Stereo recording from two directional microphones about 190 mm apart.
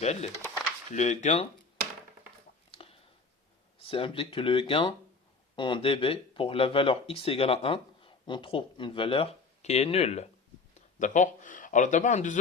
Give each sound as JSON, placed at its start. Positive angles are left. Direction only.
{"t": 0.0, "sound": "speech", "side_deg": 35}
{"t": 2.7, "sound": "a sound", "side_deg": 30}
{"t": 3.8, "sound": "speech", "side_deg": 30}